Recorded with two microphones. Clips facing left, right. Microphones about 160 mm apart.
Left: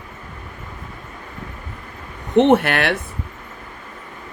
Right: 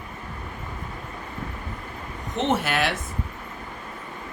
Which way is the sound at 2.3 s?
60° left (ahead or behind).